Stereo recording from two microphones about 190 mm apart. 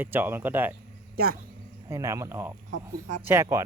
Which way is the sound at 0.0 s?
10° right (ahead or behind).